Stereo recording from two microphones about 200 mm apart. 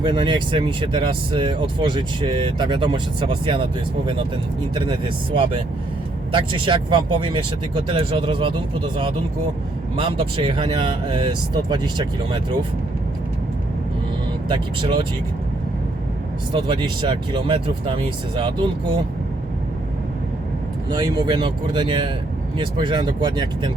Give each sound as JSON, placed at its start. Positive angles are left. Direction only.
{"t": 0.0, "sound": "speech", "side_deg": -25}
{"t": 14.5, "sound": "speech", "side_deg": -25}
{"t": 16.5, "sound": "speech", "side_deg": -25}
{"t": 20.9, "sound": "speech", "side_deg": -20}